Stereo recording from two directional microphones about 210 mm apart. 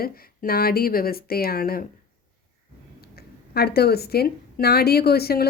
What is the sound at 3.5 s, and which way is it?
Speech, 50° left (ahead or behind).